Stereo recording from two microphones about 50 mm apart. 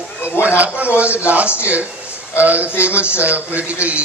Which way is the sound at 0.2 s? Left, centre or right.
Left.